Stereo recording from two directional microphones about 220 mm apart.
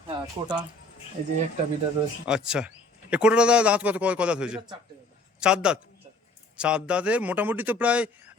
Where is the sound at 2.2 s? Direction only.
5° right (ahead or behind).